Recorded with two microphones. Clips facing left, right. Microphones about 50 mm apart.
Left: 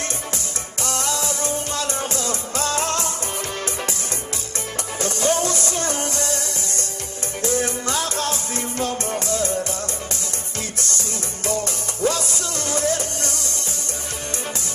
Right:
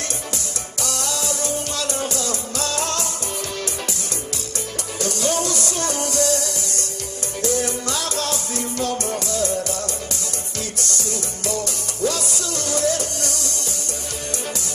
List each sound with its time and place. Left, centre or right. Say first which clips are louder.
0.8 s music: left 2 dB; left
4.9 s music: left 1 dB; left
10.8 s music: right 2 dB; left